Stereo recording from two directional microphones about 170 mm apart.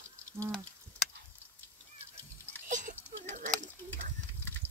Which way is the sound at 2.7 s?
50° right (ahead or behind).